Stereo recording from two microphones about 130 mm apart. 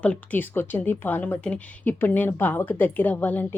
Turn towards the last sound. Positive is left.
turn(degrees=15)  # may be behind; listen again after turning